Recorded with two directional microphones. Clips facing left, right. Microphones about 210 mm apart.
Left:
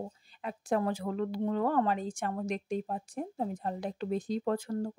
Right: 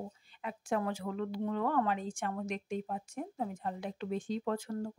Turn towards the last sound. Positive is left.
turn(degrees=35)  # may be behind; listen again after turning